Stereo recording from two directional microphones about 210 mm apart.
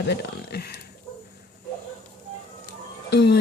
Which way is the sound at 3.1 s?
55° left (ahead or behind).